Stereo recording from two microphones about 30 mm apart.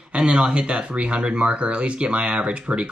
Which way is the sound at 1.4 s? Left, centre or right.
Right.